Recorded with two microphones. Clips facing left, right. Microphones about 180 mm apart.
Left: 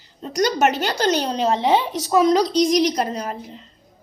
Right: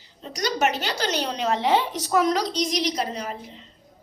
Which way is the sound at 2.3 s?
40° left (ahead or behind).